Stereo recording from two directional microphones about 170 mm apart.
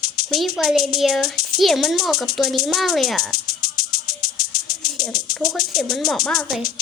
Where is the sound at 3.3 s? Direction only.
60° left (ahead or behind).